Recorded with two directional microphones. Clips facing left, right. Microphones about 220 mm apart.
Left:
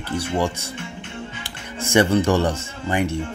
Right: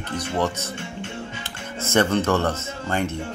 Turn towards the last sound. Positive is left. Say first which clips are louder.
# left 2 dB
turn(degrees=15)  # may be behind; listen again after turning